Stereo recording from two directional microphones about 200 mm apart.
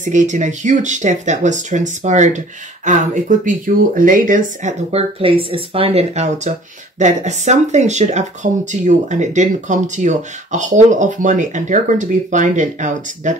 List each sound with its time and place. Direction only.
0.0 s speech: 35° right (ahead or behind)